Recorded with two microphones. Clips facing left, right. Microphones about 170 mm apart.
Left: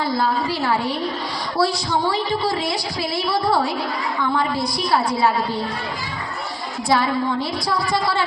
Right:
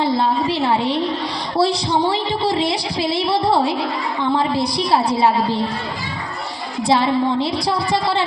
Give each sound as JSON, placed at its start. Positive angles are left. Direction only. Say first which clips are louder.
{"t": 0.0, "sound": "a woman's voice", "louder": "right 3 dB", "side_deg": -25}
{"t": 6.8, "sound": "a woman's voice", "louder": "right 3 dB", "side_deg": -25}